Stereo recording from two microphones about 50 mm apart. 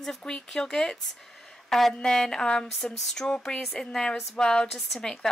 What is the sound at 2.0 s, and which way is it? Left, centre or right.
Speech, centre.